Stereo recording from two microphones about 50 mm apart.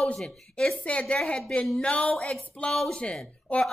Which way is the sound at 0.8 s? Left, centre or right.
Left.